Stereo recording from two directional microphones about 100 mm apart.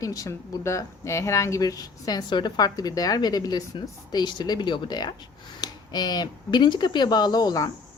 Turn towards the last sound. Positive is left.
turn(degrees=40)  # may be behind; listen again after turning